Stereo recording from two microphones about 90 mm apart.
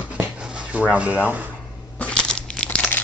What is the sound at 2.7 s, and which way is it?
Crumpling, 20° left (ahead or behind).